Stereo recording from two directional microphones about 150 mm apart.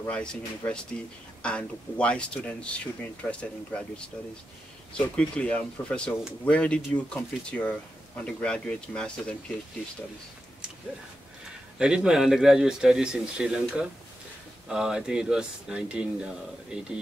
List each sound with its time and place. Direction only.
0.0 s speech: 5° left (ahead or behind)
11.8 s speech: 5° right (ahead or behind)